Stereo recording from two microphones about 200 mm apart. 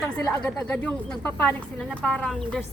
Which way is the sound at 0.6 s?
5° left (ahead or behind).